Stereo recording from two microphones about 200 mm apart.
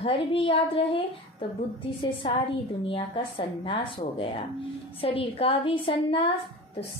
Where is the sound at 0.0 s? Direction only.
25° left (ahead or behind).